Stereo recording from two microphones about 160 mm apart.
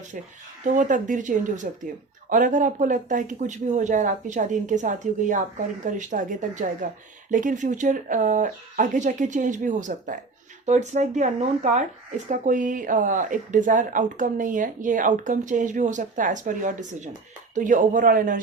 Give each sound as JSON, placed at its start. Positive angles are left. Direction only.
{"t": 0.6, "sound": "a man's voice", "side_deg": -55}